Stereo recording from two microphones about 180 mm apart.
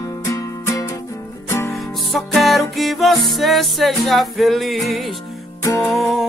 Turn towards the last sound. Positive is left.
turn(degrees=0)  # may be behind; listen again after turning